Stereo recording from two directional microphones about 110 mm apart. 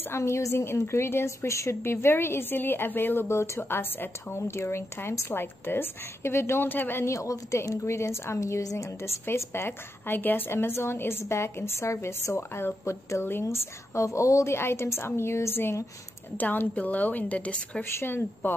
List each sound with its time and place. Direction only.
0.1 s a woman's voice: 25° left (ahead or behind)